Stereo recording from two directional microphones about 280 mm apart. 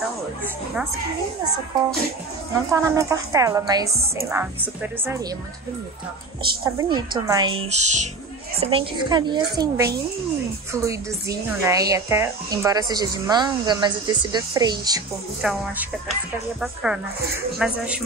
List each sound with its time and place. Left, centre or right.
2.7 s speech: centre
6.5 s speech: centre
15.4 s speech: centre
16.6 s speech: centre